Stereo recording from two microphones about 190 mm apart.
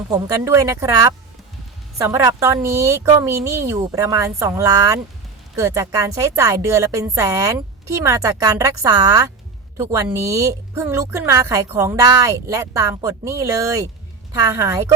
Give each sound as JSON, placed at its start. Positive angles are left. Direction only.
{"t": 0.1, "sound": "a woman's voice", "side_deg": -20}